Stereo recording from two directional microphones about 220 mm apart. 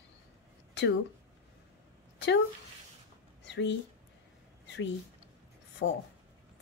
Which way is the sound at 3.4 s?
55° left (ahead or behind).